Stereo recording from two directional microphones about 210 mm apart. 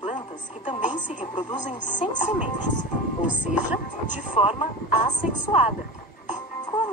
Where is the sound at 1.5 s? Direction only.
35° left (ahead or behind).